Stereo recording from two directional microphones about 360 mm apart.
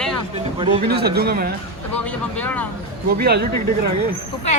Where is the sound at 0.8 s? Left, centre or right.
Right.